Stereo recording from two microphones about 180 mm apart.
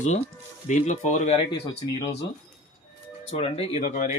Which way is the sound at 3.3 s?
35° left (ahead or behind).